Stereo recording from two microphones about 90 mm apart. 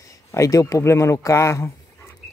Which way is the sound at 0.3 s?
35° left (ahead or behind).